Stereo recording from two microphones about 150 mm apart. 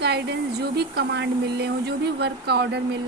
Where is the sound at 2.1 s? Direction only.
90° right.